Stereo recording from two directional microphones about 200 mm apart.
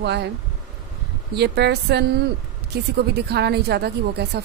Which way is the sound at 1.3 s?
55° right (ahead or behind).